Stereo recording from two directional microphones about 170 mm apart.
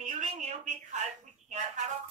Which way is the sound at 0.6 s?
45° right (ahead or behind).